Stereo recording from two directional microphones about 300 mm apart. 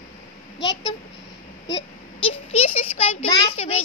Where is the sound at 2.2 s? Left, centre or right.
Centre.